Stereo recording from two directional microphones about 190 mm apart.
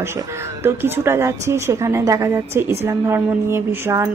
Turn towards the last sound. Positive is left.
turn(degrees=-10)  # may be behind; listen again after turning